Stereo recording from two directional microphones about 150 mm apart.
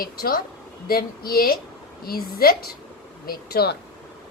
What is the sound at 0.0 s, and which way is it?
A woman's voice, 80° left.